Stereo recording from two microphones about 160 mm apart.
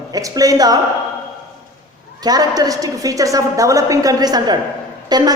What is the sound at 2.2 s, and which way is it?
A woman's voice, 25° right (ahead or behind).